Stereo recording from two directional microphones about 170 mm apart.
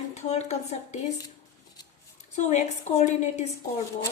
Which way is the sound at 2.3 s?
45° left (ahead or behind).